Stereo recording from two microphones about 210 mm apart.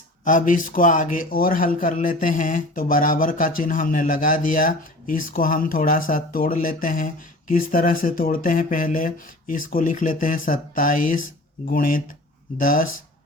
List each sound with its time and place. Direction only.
0.3 s speech: 40° left (ahead or behind)